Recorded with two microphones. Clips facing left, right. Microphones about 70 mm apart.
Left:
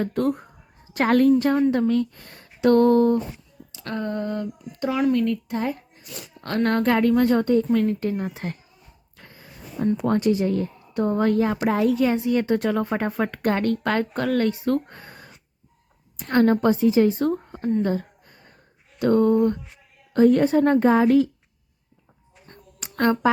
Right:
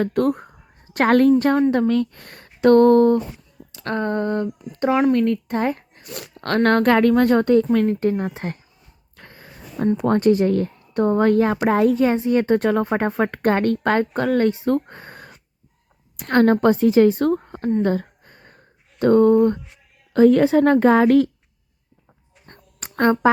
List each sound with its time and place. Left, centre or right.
0.0 s speech: right
1.9 s speech: right
7.9 s a woman's voice: right
9.1 s a sound: right
10.0 s a woman's voice: right
16.1 s speech: right
17.8 s a sound: right
18.9 s a woman's voice: right
20.3 s a woman's voice: right
23.0 s a woman's voice: right